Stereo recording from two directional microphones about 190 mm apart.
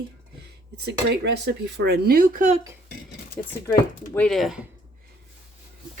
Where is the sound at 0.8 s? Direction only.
60° right (ahead or behind); by 2.6 s 40° right (ahead or behind).